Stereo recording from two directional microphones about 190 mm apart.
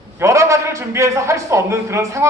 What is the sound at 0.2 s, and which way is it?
A woman's voice, 15° right (ahead or behind).